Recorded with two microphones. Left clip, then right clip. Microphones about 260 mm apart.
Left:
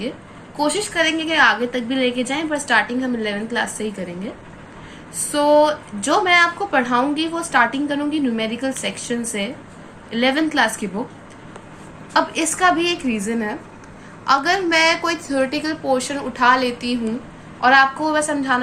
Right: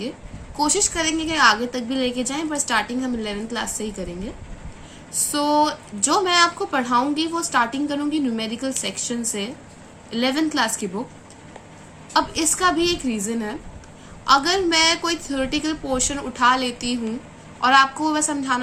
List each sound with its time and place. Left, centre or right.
0.5 s a woman's voice: right
5.3 s a woman's voice: right
12.1 s a woman's voice: right